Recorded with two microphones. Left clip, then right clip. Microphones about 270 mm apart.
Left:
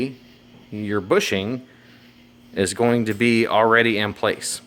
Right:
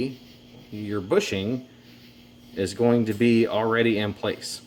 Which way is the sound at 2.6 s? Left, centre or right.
Left.